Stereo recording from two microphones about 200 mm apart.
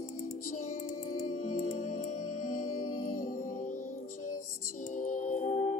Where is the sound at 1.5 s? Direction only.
40° left (ahead or behind).